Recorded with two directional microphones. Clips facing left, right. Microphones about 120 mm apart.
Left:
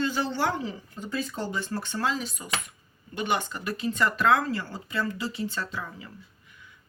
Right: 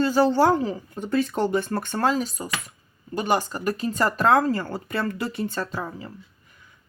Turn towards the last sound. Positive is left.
turn(degrees=-35)  # may be behind; listen again after turning